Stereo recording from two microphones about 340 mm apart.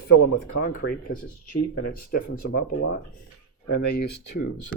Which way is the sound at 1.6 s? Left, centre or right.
Left.